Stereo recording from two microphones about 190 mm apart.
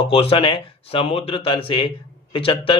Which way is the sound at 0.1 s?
30° left (ahead or behind).